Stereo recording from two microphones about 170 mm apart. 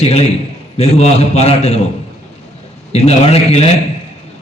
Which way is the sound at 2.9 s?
40° left (ahead or behind).